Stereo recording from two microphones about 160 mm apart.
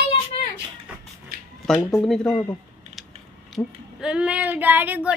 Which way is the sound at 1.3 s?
70° right (ahead or behind).